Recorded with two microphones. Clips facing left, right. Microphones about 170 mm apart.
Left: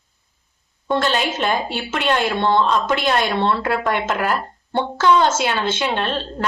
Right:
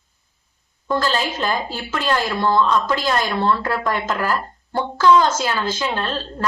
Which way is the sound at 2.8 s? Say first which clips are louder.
Left 1 dB; 70° left (ahead or behind).